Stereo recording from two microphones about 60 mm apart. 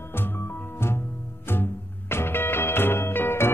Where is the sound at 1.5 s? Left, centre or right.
Left.